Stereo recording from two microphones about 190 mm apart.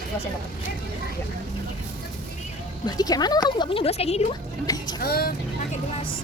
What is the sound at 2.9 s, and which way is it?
Speech, 20° left (ahead or behind).